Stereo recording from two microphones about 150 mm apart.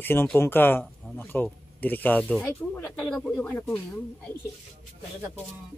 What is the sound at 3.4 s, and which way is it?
Speech, 10° left (ahead or behind).